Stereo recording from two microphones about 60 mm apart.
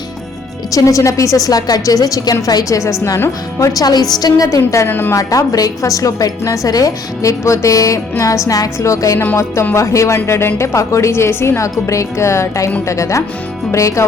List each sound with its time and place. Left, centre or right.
0.7 s a woman's voice: left
3.6 s a woman's voice: left
4.9 s speech: left
5.1 s a woman's voice: left
10.2 s speech: left